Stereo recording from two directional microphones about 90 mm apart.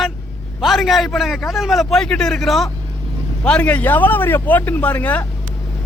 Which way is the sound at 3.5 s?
15° left (ahead or behind).